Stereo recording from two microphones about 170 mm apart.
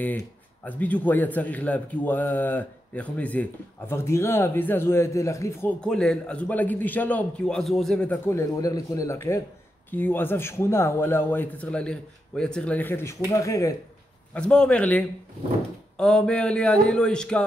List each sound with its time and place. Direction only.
0.7 s a man's voice: 10° left (ahead or behind)
14.3 s a man's voice: 5° left (ahead or behind)